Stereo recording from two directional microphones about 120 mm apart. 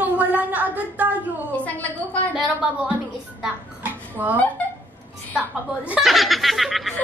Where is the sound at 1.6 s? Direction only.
15° left (ahead or behind).